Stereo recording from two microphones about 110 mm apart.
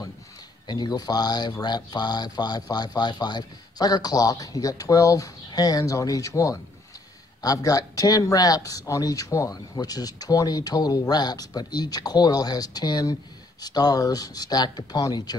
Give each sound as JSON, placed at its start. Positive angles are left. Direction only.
{"t": 0.7, "sound": "speech", "side_deg": 40}